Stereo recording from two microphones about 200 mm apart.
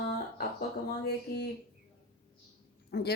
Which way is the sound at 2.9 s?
55° left (ahead or behind).